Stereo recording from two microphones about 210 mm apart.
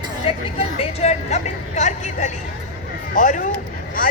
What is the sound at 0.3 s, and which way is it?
A woman's voice, 25° left (ahead or behind).